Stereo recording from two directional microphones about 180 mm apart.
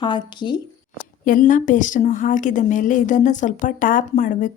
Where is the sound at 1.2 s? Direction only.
50° left (ahead or behind).